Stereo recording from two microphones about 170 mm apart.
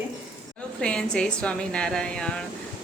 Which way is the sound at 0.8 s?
5° left (ahead or behind).